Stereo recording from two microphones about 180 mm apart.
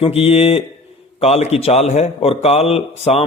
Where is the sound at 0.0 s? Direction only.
30° left (ahead or behind).